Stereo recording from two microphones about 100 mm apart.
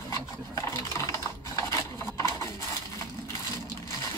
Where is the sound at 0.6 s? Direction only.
35° left (ahead or behind).